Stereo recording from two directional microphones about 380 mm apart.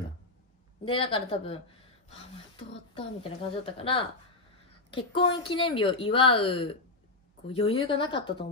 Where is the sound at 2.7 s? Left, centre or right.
Centre.